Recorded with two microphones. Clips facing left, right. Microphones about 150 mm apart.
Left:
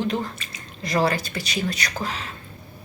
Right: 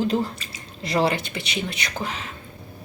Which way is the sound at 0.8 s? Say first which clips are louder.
Even; 25° right (ahead or behind).